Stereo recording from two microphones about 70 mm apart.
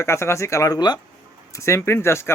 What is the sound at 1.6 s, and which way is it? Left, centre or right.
Speech, left.